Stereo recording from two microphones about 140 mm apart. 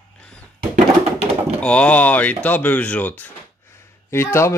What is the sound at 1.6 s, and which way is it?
Speech, 10° left (ahead or behind).